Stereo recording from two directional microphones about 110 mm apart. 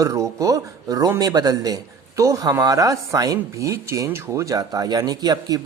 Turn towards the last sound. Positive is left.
turn(degrees=-35)  # may be behind; listen again after turning